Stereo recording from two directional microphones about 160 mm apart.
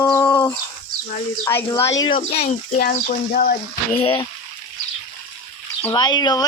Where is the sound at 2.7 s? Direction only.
65° left (ahead or behind).